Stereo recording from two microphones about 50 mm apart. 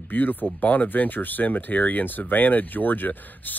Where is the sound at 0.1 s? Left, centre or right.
Left.